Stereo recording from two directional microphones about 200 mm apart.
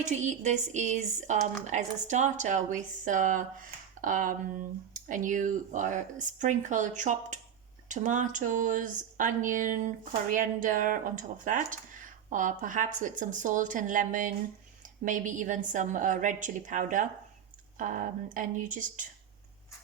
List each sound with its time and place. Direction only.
0.0 s speech: 35° right (ahead or behind)